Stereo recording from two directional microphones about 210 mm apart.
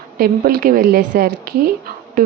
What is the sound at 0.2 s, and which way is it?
A woman's voice, 45° right (ahead or behind).